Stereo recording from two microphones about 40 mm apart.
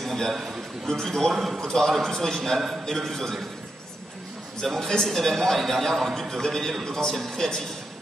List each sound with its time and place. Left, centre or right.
0.0 s a sound: centre
0.3 s a man's voice: centre
0.8 s a man's voice: centre
1.3 s a man's voice: centre
1.7 s a man's voice: centre
4.6 s a man's voice: centre